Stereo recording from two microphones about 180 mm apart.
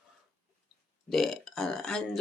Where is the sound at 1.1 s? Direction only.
Centre (ahead or behind).